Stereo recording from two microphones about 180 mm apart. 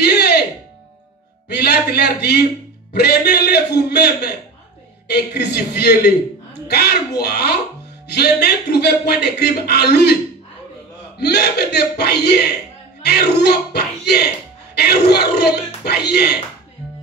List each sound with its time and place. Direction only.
0.0 s music: 65° left (ahead or behind)
1.5 s a man's voice: 65° left (ahead or behind)
11.1 s speech: 65° left (ahead or behind)